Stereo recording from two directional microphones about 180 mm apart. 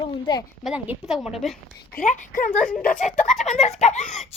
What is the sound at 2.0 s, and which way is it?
A woman's voice, 45° left (ahead or behind).